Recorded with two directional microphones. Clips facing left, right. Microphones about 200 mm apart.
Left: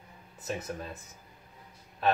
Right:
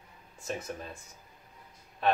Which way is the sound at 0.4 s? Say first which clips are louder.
Left 1 dB; centre (ahead or behind).